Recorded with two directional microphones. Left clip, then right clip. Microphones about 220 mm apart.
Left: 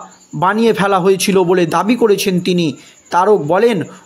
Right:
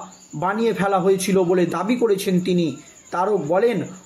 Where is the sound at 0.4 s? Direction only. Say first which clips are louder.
Left 8 dB; 45° left (ahead or behind).